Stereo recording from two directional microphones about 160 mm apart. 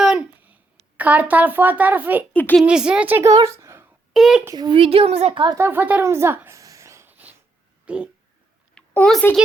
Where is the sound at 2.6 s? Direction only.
5° right (ahead or behind).